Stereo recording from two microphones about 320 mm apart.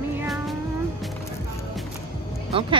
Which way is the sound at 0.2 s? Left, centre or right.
Centre.